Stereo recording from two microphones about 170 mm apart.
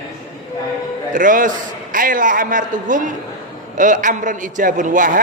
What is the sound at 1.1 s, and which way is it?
A man's voice, 50° right (ahead or behind).